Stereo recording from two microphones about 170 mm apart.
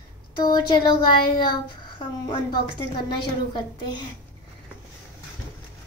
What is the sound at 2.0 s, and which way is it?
Speech, 35° left (ahead or behind).